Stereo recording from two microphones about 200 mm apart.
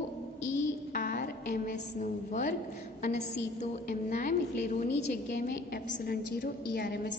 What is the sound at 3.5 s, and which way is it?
A woman's voice, 40° left (ahead or behind).